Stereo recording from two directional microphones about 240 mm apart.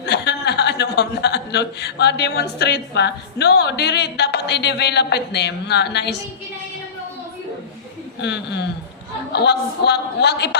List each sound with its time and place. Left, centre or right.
0.0 s speech: left
8.2 s a woman's voice: left